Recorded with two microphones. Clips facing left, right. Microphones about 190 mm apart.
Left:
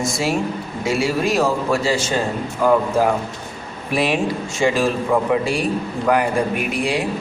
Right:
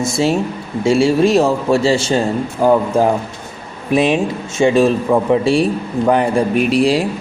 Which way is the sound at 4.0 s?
20° right (ahead or behind).